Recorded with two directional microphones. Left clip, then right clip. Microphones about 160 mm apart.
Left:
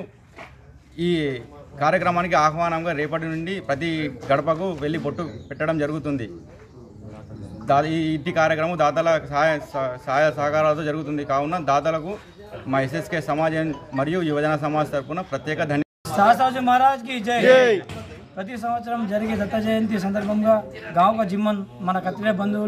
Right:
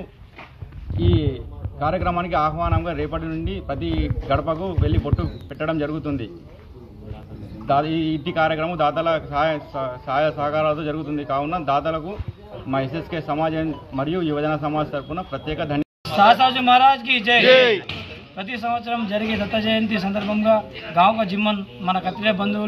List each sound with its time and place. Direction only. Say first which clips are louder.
0.9 s a man's voice: even; 20° left (ahead or behind)
7.6 s a man's voice: even; 20° left (ahead or behind)
17.5 s speech: left 1 dB; 90° left
18.3 s a man's voice: right 2 dB; 15° left (ahead or behind)